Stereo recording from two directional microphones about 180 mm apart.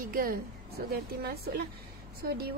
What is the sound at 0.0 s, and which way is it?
Speech, 50° right (ahead or behind).